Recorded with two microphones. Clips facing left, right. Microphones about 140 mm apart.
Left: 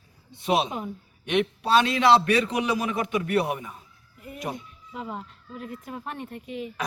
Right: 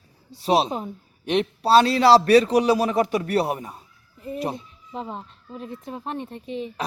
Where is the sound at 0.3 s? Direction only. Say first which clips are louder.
Right 4 dB; 35° right (ahead or behind).